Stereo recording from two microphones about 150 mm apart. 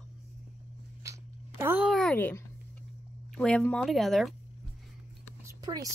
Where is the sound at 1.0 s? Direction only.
20° right (ahead or behind).